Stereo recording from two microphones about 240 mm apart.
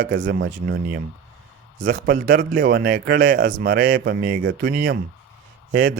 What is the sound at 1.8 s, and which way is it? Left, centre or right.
Speech, right.